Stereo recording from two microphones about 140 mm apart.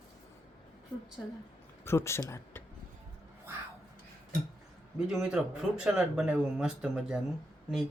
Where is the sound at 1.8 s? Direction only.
15° left (ahead or behind).